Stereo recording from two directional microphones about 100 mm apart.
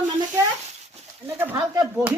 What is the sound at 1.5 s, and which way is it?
Speech, 35° right (ahead or behind).